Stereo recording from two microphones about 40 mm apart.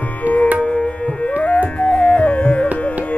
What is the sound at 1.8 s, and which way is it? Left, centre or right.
Music, left.